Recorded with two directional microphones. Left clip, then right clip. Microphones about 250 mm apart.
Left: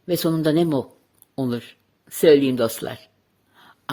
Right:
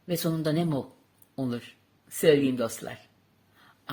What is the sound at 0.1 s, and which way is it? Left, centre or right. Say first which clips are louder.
Speech: left 8 dB; left.